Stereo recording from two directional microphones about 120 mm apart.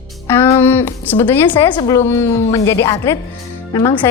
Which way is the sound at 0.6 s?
20° left (ahead or behind).